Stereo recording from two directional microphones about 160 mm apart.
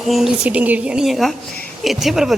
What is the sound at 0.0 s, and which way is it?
Speech, centre (ahead or behind).